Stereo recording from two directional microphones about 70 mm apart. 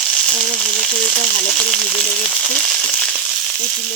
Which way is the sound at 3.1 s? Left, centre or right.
Centre.